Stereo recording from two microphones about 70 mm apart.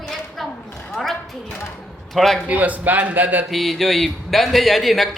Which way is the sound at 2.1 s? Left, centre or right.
Centre.